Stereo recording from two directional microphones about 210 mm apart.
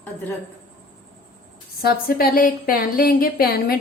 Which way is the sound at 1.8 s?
45° left (ahead or behind).